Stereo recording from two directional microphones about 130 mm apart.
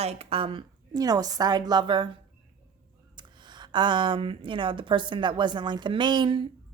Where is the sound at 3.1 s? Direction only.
35° right (ahead or behind).